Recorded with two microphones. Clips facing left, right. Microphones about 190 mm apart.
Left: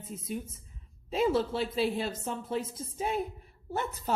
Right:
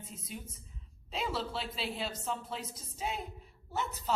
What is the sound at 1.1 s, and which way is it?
Speech, 50° left (ahead or behind).